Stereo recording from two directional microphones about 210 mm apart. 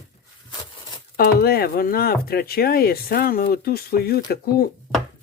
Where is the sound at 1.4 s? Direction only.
45° left (ahead or behind).